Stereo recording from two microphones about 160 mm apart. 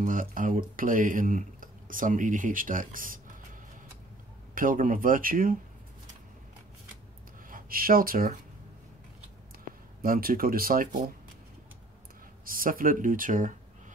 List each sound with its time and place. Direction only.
0.0 s speech: 55° right (ahead or behind)
4.6 s speech: 60° right (ahead or behind)
7.4 s speech: 60° right (ahead or behind)
10.0 s speech: 65° right (ahead or behind)
12.4 s speech: 60° right (ahead or behind)